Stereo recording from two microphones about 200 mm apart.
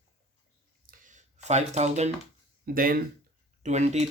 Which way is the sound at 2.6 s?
45° right (ahead or behind).